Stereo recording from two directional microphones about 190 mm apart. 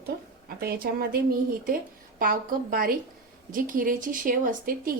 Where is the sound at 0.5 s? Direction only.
55° right (ahead or behind).